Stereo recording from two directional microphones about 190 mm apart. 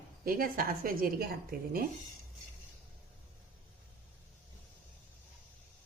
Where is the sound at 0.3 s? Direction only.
50° right (ahead or behind).